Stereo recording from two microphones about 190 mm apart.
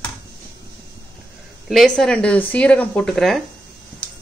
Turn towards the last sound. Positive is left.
turn(degrees=0)  # may be behind; listen again after turning